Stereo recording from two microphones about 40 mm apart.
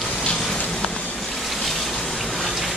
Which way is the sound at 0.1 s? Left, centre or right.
Left.